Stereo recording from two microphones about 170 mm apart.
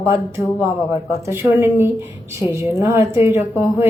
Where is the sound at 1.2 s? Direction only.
15° right (ahead or behind).